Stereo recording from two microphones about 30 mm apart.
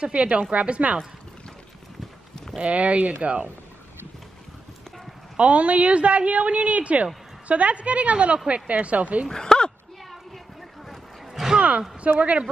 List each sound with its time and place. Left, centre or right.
0.0 s a woman's voice: right
0.3 s a woman's voice: right
2.6 s a woman's voice: right
5.4 s a woman's voice: right
9.3 s speech: left
12.0 s a woman's voice: right